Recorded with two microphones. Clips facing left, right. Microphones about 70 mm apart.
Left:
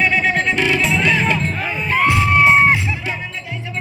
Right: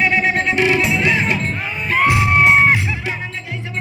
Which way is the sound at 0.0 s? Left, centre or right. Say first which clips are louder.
Even; centre.